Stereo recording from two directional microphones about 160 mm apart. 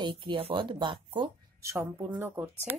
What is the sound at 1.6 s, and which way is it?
Speech, 15° right (ahead or behind).